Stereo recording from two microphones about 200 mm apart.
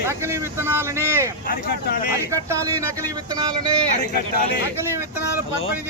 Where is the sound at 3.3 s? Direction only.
20° right (ahead or behind).